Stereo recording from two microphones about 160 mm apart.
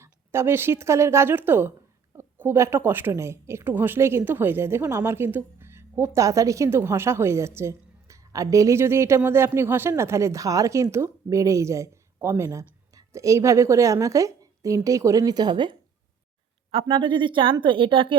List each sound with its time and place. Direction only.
0.0 s speech: 15° right (ahead or behind)
16.8 s speech: 30° right (ahead or behind)